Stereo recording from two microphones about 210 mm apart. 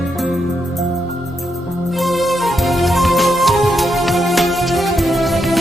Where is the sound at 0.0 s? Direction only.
Centre (ahead or behind).